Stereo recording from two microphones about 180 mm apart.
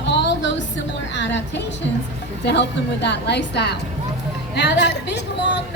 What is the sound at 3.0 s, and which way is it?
A woman's voice, 70° left (ahead or behind).